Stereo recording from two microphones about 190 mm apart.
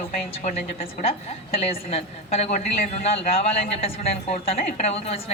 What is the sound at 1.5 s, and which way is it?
A woman's voice, 30° left (ahead or behind).